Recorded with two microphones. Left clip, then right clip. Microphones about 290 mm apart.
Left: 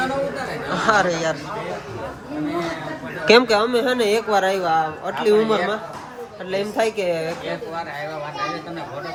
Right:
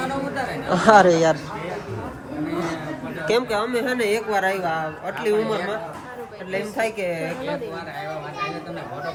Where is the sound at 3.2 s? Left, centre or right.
Left.